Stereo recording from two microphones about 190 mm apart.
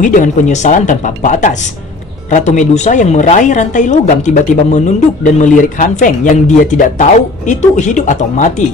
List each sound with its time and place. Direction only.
0.0 s speech: 40° left (ahead or behind)